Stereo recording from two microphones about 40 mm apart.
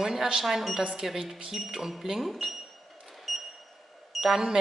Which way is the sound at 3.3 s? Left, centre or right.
Centre.